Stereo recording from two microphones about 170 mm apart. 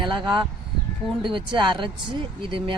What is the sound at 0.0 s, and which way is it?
Speech, 30° right (ahead or behind).